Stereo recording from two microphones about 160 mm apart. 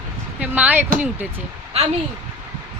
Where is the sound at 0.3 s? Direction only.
10° right (ahead or behind).